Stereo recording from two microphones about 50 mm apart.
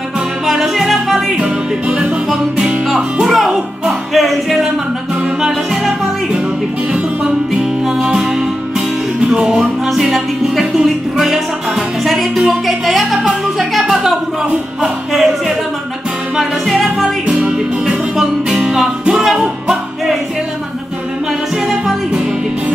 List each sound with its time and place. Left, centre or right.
0.5 s music: centre
1.3 s music: centre
3.0 s speech: centre
3.3 s music: centre
5.4 s music: centre
15.1 s music: centre
17.3 s music: right
18.1 s music: centre
21.6 s music: centre